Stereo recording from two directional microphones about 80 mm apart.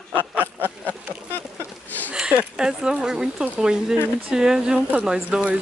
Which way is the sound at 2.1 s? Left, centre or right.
Centre.